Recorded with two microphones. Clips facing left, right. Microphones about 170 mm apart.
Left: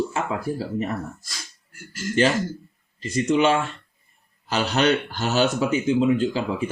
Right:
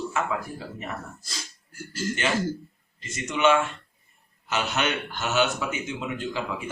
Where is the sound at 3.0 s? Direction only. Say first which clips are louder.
Left 6 dB; 35° left (ahead or behind).